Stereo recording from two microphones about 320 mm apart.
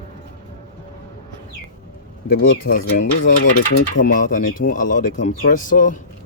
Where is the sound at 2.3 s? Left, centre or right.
Left.